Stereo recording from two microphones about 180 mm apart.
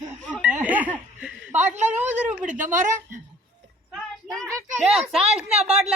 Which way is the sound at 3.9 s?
Centre (ahead or behind).